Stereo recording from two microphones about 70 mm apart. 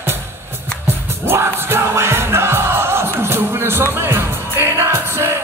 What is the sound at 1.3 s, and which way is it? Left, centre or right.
Music, right.